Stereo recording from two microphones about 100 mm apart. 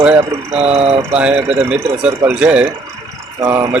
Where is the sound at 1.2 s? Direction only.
10° right (ahead or behind).